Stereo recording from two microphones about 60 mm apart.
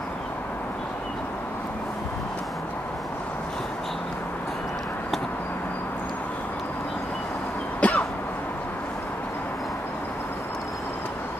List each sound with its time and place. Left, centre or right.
7.8 s cough: left